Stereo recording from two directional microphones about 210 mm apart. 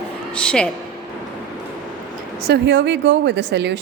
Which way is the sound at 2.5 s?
55° right (ahead or behind).